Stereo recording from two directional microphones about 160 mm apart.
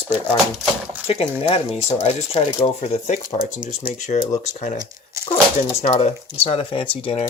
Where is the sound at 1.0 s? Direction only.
40° left (ahead or behind).